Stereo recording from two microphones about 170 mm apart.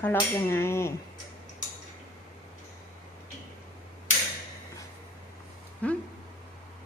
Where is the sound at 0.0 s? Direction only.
10° left (ahead or behind).